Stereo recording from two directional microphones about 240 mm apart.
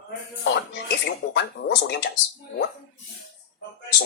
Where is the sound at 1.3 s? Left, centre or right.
Left.